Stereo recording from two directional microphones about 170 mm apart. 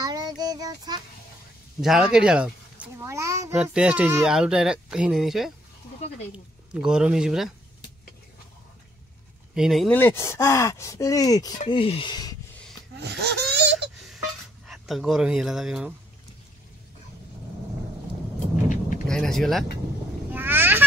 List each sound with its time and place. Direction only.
0.0 s child singing: 25° right (ahead or behind)
1.8 s a sound: 5° right (ahead or behind)
3.7 s speech: 5° right (ahead or behind)
6.7 s speech: 5° right (ahead or behind)
9.6 s speech: centre (ahead or behind)
9.9 s speech: 15° left (ahead or behind)
11.7 s speech: 30° left (ahead or behind)
13.0 s speech: 75° right (ahead or behind)
13.7 s a sound: centre (ahead or behind)
14.7 s speech: centre (ahead or behind)
19.0 s speech: 5° left (ahead or behind)
20.2 s vehicle: 10° right (ahead or behind)